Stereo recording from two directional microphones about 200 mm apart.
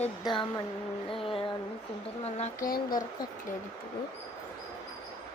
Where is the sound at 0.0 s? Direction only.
25° left (ahead or behind).